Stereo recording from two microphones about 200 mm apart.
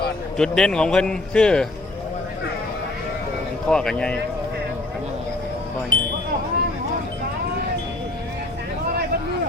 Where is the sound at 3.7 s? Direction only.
5° left (ahead or behind).